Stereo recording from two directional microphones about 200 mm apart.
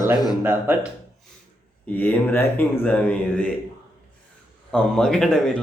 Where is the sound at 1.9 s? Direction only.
10° left (ahead or behind).